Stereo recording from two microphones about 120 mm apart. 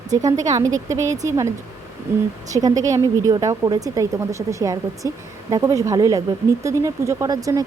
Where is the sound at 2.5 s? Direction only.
30° right (ahead or behind).